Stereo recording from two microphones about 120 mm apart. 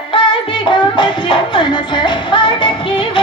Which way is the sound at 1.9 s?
45° left (ahead or behind).